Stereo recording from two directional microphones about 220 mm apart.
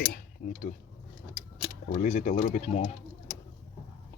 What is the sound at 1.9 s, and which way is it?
Speech, 35° left (ahead or behind).